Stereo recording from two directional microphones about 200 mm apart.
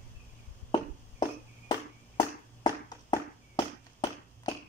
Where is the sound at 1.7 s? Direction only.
20° left (ahead or behind).